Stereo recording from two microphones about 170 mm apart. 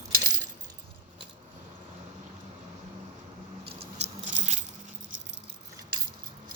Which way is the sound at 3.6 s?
35° right (ahead or behind).